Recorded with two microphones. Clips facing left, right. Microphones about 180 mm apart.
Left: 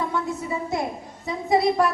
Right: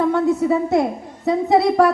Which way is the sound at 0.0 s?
60° right (ahead or behind).